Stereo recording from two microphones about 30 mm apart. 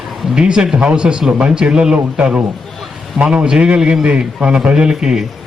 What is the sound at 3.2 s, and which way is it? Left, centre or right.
A man's voice, right.